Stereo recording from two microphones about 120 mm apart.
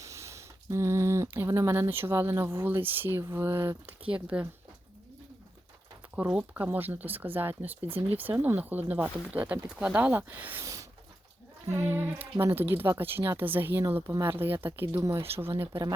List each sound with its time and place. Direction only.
0.0 s speech: 25° right (ahead or behind); by 4.4 s 10° right (ahead or behind)
6.1 s speech: 15° right (ahead or behind)
10.6 s a sound: 25° right (ahead or behind)
11.7 s speech: 20° right (ahead or behind)